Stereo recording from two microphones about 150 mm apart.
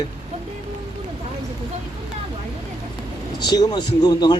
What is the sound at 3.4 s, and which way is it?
Speech, 25° left (ahead or behind).